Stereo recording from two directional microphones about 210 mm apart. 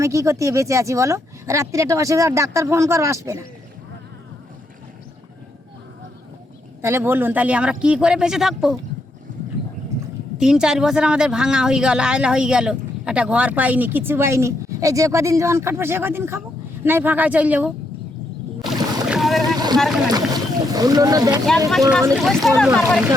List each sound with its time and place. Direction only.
0.0 s speech: 15° right (ahead or behind)
6.8 s speech: 10° right (ahead or behind)
10.3 s speech: 5° right (ahead or behind)
19.0 s boat: centre (ahead or behind)
19.4 s boat: 20° right (ahead or behind)
19.7 s speech: centre (ahead or behind)
20.1 s speech: 20° right (ahead or behind)
21.7 s speech: centre (ahead or behind)